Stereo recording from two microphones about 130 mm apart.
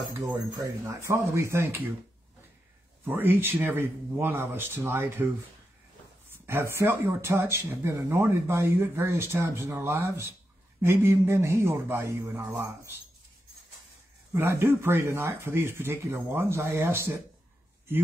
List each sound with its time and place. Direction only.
0.6 s speech: 20° right (ahead or behind)
3.1 s speech: 15° right (ahead or behind)
6.3 s speech: 15° right (ahead or behind)
14.3 s speech: 20° right (ahead or behind)